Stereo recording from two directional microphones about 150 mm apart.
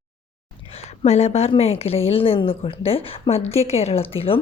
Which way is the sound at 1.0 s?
45° left (ahead or behind).